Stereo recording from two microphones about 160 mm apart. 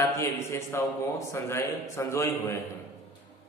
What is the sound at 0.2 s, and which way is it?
A man's voice, 20° left (ahead or behind).